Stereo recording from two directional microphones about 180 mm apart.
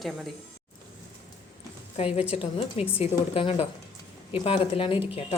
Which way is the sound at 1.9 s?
30° left (ahead or behind).